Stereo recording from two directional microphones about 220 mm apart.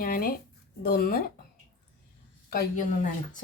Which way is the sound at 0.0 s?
40° left (ahead or behind).